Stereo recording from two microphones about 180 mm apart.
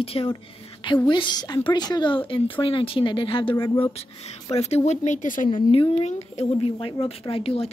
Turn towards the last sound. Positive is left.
turn(degrees=30)  # may be behind; listen again after turning